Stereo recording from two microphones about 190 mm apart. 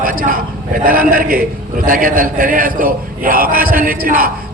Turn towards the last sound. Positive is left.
turn(degrees=-50)  # may be behind; listen again after turning